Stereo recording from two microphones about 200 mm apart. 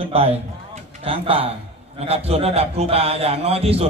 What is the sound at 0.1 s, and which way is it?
A man's voice, 30° right (ahead or behind).